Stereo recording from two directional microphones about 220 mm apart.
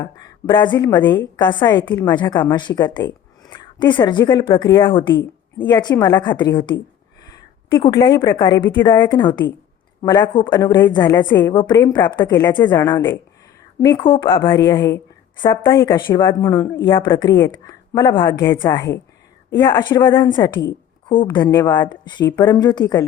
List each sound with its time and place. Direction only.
0.2 s a woman's voice: 20° left (ahead or behind)
5.5 s a woman's voice: 10° left (ahead or behind)
11.5 s a woman's voice: 20° left (ahead or behind)
14.4 s a woman's voice: 10° left (ahead or behind)